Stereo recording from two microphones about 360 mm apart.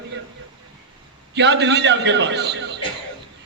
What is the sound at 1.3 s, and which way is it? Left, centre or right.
A man's voice, right.